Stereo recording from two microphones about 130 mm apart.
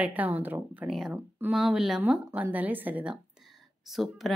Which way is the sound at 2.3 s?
15° right (ahead or behind).